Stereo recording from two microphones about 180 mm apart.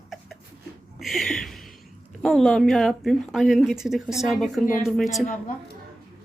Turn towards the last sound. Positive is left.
turn(degrees=0)  # may be behind; listen again after turning